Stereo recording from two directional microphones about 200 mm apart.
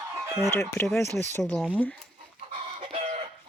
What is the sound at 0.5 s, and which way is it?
Speech, 10° left (ahead or behind).